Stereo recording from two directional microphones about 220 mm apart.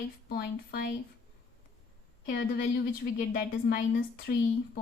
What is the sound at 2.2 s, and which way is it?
A woman's voice, 40° left (ahead or behind).